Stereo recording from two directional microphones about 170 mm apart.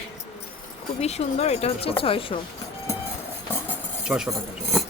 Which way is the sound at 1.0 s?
40° left (ahead or behind).